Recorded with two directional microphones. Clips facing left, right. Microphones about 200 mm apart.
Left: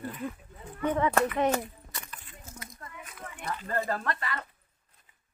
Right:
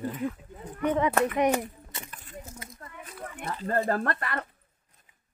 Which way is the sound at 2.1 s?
45° right (ahead or behind).